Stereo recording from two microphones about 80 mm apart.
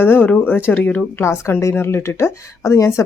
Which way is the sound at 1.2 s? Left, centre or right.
Left.